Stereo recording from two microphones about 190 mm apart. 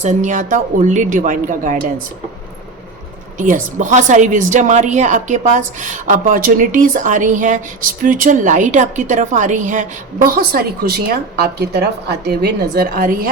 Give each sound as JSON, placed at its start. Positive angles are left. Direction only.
{"t": 0.0, "sound": "a woman's voice", "side_deg": -40}
{"t": 3.3, "sound": "a woman's voice", "side_deg": -40}